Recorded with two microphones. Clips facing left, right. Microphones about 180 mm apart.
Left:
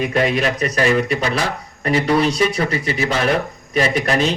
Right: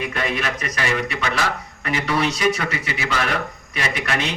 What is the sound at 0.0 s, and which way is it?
A man's voice, 35° left (ahead or behind).